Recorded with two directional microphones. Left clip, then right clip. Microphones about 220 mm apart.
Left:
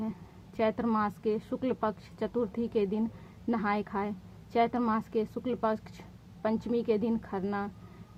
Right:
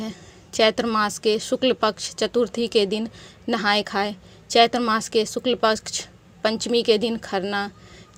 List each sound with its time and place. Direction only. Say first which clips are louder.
0.5 s speech: right 10 dB; 25° right (ahead or behind)